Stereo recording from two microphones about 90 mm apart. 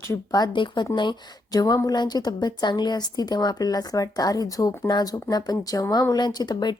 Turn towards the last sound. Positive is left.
turn(degrees=55)  # may be behind; listen again after turning